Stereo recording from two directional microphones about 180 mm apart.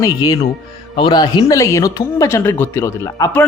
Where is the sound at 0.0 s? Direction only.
20° left (ahead or behind).